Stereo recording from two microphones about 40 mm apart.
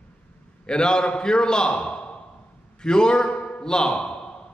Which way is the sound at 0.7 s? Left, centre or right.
Left.